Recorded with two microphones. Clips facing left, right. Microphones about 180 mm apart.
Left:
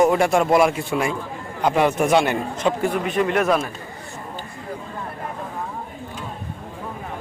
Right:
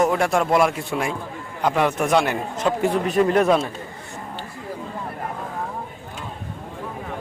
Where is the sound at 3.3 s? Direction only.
25° right (ahead or behind).